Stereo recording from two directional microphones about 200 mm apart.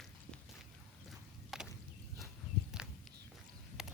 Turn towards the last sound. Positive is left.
turn(degrees=-5)  # may be behind; listen again after turning